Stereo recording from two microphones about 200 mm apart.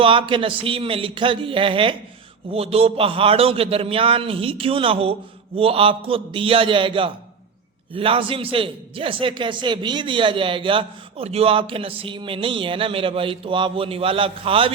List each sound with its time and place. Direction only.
0.0 s a man's voice: 25° right (ahead or behind)